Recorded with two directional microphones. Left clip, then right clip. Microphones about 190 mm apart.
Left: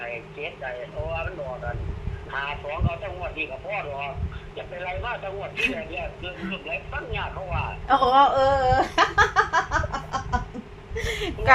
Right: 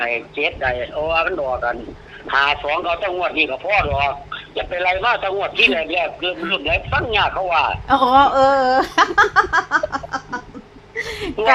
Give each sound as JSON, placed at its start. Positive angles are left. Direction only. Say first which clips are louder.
{"t": 0.0, "sound": "a man's voice", "louder": "right 12 dB", "side_deg": -70}
{"t": 7.9, "sound": "speech", "louder": "right 3 dB", "side_deg": -20}
{"t": 10.9, "sound": "a sound", "louder": "right 5 dB", "side_deg": -15}